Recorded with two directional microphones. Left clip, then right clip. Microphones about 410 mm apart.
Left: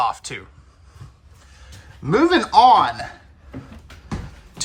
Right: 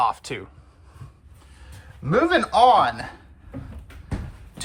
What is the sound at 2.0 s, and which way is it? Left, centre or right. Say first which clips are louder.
Speech: left 3 dB; centre.